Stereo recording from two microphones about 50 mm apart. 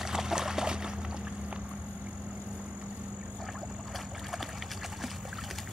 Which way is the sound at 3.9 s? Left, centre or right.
Centre.